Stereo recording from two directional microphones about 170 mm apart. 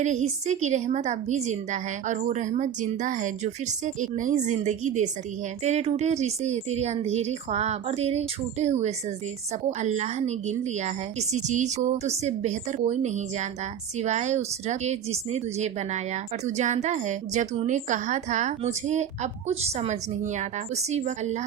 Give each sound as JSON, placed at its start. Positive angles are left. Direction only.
{"t": 0.0, "sound": "a woman's voice", "side_deg": -45}